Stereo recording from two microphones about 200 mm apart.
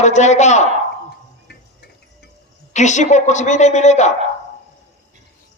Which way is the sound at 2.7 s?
35° left (ahead or behind).